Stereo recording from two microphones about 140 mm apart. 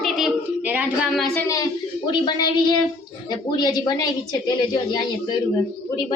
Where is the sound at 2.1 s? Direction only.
30° left (ahead or behind).